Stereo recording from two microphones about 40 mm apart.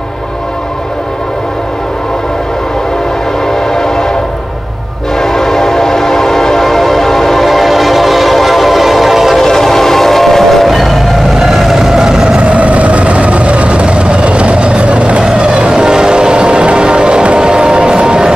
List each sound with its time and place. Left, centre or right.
3.4 s train: centre
5.2 s train: centre
9.5 s train: centre
11.3 s vehicle: centre
12.4 s vehicle: right; by 18.3 s centre